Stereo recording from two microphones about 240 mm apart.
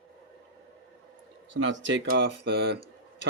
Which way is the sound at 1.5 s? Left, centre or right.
Right.